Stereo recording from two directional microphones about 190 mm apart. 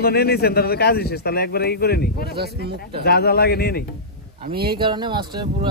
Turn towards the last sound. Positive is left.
turn(degrees=-25)  # may be behind; listen again after turning